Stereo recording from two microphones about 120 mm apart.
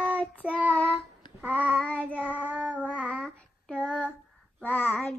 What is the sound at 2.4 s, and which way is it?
Child singing, 10° right (ahead or behind).